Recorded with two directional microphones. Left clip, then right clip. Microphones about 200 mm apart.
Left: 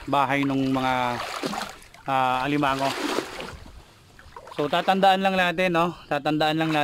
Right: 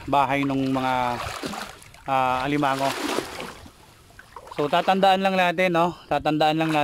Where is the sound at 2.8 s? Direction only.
30° right (ahead or behind).